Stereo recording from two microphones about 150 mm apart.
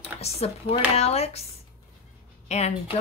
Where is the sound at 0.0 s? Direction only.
45° left (ahead or behind).